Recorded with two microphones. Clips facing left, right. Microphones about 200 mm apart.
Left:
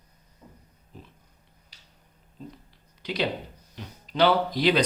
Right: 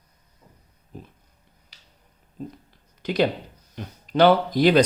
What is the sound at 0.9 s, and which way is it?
Dog, 45° right (ahead or behind).